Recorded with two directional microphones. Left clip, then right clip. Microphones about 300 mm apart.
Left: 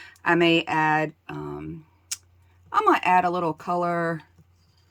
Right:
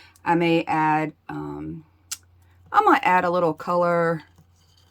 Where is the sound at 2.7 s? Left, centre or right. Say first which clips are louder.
Right 2 dB; centre.